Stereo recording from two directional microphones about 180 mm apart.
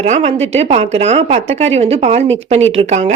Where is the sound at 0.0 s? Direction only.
40° right (ahead or behind).